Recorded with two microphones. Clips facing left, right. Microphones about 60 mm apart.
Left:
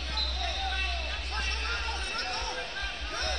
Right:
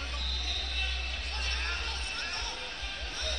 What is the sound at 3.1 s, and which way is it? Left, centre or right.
Basketball bounce, left.